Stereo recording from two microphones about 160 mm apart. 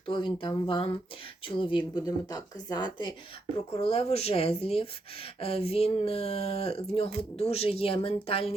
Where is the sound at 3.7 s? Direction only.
40° left (ahead or behind).